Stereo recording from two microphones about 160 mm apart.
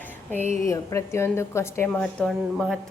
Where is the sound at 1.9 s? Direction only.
5° left (ahead or behind).